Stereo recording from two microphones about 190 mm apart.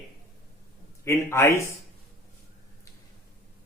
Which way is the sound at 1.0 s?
15° left (ahead or behind).